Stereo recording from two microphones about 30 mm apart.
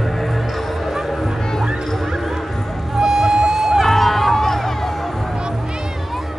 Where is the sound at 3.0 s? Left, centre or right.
Centre.